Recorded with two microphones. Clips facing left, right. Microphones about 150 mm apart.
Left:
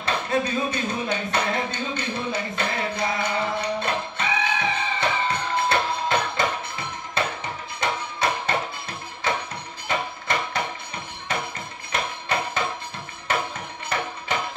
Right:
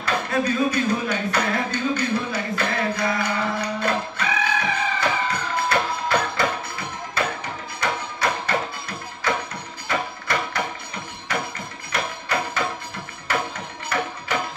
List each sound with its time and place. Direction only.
0.0 s a sound: 25° left (ahead or behind)
7.2 s music: 25° left (ahead or behind)
11.9 s music: 25° left (ahead or behind)